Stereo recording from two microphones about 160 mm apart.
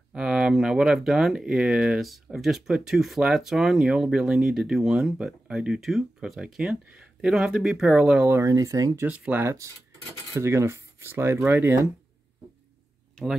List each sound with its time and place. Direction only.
0.1 s speech: 5° right (ahead or behind); by 9.0 s 20° right (ahead or behind)
9.0 s speech: 10° right (ahead or behind)